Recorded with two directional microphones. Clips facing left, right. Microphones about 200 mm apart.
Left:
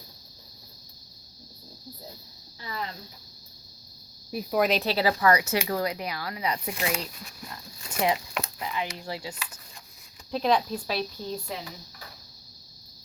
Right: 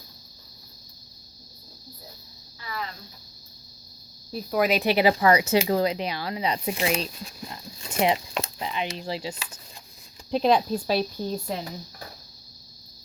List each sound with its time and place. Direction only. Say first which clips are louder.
2.6 s speech: right 1 dB; 25° left (ahead or behind)
4.3 s speech: even; 10° left (ahead or behind)
4.6 s speech: right 4 dB; 10° right (ahead or behind); by 12.0 s 45° right (ahead or behind)